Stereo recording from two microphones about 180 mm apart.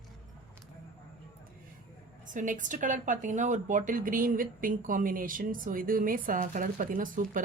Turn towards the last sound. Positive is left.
turn(degrees=-50)  # may be behind; listen again after turning